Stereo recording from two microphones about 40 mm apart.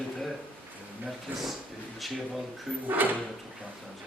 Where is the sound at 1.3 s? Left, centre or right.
Right.